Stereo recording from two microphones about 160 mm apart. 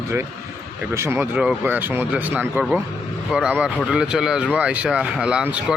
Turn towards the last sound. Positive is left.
turn(degrees=-5)  # may be behind; listen again after turning